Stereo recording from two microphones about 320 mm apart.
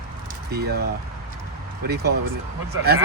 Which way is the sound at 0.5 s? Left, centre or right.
Right.